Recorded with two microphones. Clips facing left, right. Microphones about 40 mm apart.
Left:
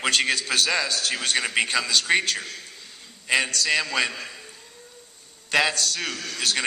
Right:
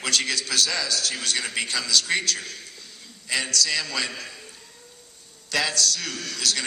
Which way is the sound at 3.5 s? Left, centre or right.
Left.